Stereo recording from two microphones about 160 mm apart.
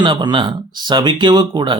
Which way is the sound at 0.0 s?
25° right (ahead or behind).